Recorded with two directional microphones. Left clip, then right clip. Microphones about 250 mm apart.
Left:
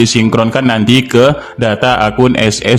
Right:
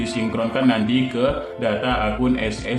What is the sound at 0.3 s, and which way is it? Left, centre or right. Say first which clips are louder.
A man's voice: left 5 dB; left.